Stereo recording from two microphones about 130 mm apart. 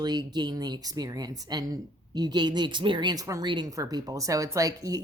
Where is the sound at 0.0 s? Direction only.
35° right (ahead or behind).